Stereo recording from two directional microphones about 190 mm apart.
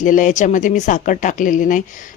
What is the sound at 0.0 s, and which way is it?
Speech, 45° left (ahead or behind).